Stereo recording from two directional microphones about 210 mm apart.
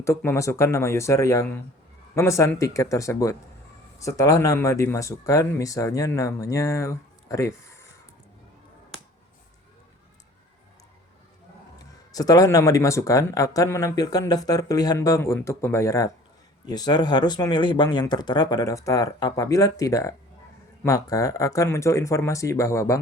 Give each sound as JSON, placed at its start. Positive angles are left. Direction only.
{"t": 0.0, "sound": "speech", "side_deg": 10}
{"t": 11.8, "sound": "speech", "side_deg": 15}